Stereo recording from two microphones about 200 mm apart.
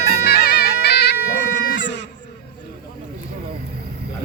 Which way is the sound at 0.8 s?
55° left (ahead or behind).